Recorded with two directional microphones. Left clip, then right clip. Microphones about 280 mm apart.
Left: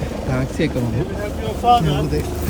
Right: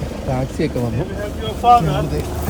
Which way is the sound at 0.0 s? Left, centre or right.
Centre.